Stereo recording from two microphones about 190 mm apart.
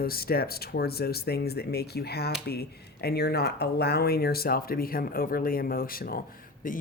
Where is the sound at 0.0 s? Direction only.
55° left (ahead or behind).